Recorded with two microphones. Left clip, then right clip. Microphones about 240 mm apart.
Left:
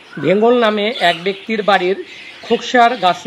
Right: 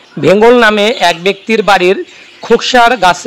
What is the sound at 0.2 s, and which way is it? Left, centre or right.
Speech, right.